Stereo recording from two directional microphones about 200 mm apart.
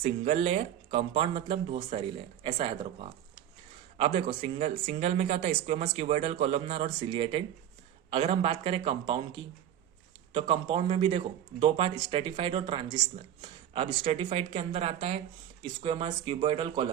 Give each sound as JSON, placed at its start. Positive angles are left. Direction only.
{"t": 0.0, "sound": "speech", "side_deg": -30}